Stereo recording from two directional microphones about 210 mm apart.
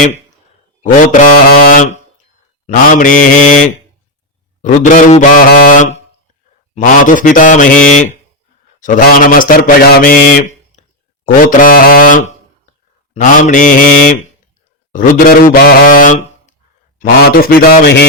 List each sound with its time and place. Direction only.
0.8 s speech: 35° left (ahead or behind)
4.6 s speech: 35° left (ahead or behind)
10.8 s a sound: 35° left (ahead or behind)
11.3 s a man's voice: 40° left (ahead or behind)